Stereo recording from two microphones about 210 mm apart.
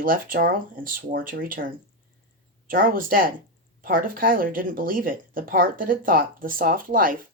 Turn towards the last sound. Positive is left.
turn(degrees=-40)  # may be behind; listen again after turning